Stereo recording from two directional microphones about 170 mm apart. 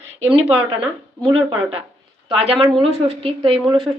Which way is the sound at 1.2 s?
30° right (ahead or behind).